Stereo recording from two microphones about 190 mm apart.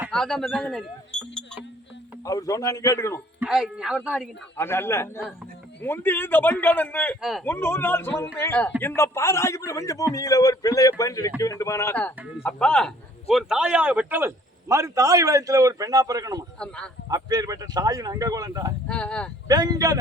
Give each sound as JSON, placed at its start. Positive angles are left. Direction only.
{"t": 0.1, "sound": "speech", "side_deg": 5}
{"t": 2.2, "sound": "a man's voice", "side_deg": 20}
{"t": 3.4, "sound": "speech", "side_deg": -5}
{"t": 4.5, "sound": "a man's voice", "side_deg": 10}
{"t": 7.5, "sound": "a man's voice", "side_deg": 10}
{"t": 16.6, "sound": "speech", "side_deg": 5}
{"t": 17.1, "sound": "speech", "side_deg": -20}
{"t": 18.9, "sound": "speech", "side_deg": 5}
{"t": 19.5, "sound": "speech", "side_deg": -20}